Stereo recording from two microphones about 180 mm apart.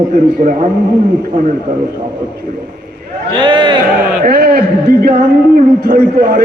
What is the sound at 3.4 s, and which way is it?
Speech, 25° right (ahead or behind).